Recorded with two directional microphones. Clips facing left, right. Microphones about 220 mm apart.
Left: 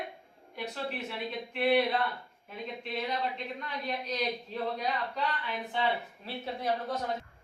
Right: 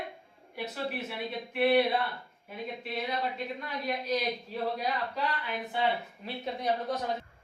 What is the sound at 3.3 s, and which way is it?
A woman's voice, 5° right (ahead or behind).